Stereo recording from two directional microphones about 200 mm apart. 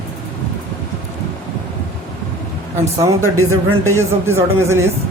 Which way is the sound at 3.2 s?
90° right.